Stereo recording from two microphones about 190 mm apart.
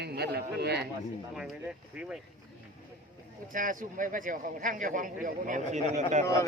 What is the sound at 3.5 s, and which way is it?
A man's voice, 45° right (ahead or behind).